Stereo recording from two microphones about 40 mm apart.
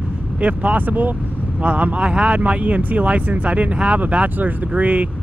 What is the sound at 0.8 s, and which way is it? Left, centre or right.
Speech, right.